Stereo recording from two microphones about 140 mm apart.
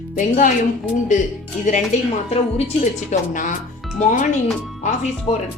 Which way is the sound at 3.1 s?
60° left (ahead or behind).